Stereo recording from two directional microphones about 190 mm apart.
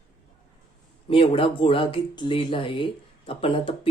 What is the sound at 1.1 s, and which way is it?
Speech, 30° left (ahead or behind).